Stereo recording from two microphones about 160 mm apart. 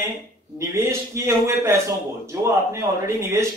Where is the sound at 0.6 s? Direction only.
20° right (ahead or behind).